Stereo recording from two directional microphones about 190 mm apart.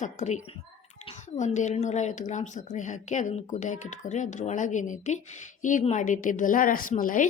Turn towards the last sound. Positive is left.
turn(degrees=45)  # may be behind; listen again after turning